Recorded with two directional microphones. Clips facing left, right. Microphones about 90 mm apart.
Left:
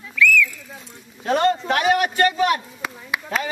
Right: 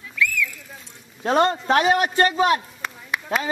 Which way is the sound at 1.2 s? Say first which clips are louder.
Even; 30° right (ahead or behind).